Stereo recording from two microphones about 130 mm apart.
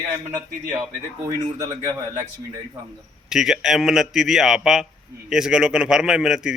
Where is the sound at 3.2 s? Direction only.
5° right (ahead or behind).